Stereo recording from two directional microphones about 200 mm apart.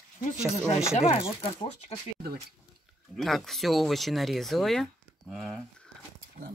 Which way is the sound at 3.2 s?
Centre (ahead or behind).